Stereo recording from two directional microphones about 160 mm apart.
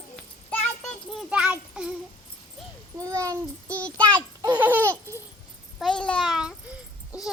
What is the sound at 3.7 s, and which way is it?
Speech, 10° left (ahead or behind).